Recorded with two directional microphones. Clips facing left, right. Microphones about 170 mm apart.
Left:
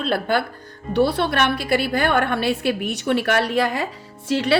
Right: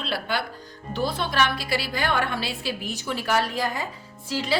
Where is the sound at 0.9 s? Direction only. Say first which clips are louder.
Left 6 dB; 65° left (ahead or behind).